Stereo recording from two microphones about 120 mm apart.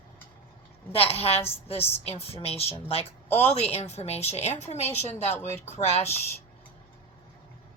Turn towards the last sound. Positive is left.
turn(degrees=60)  # may be behind; listen again after turning